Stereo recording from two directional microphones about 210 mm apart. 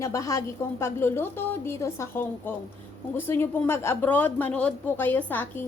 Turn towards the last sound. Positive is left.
turn(degrees=10)  # may be behind; listen again after turning